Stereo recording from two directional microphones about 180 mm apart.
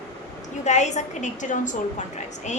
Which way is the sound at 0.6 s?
40° left (ahead or behind).